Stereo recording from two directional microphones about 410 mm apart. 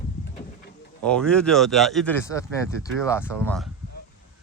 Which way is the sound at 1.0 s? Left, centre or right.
Centre.